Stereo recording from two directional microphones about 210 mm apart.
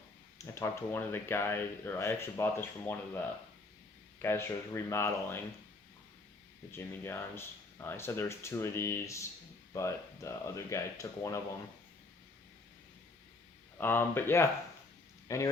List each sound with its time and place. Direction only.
0.3 s speech: 15° left (ahead or behind)
4.2 s speech: 10° left (ahead or behind)
6.7 s speech: 10° left (ahead or behind)
13.7 s speech: 10° left (ahead or behind)